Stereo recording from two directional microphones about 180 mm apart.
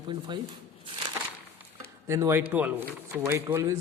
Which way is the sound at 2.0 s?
15° right (ahead or behind).